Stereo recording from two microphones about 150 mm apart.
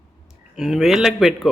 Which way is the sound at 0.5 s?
Centre (ahead or behind).